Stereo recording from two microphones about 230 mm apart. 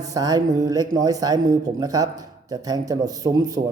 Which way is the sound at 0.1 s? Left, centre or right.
Centre.